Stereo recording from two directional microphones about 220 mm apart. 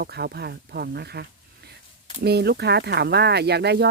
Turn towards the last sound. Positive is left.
turn(degrees=-50)  # may be behind; listen again after turning